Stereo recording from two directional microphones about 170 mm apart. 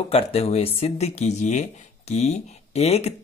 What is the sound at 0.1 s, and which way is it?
Speech, 35° left (ahead or behind).